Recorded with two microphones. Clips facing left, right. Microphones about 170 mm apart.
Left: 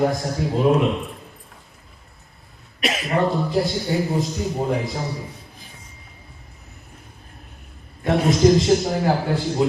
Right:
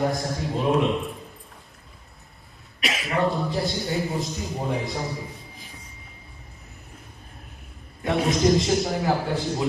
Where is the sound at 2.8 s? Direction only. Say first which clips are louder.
Left 4 dB; 35° left (ahead or behind).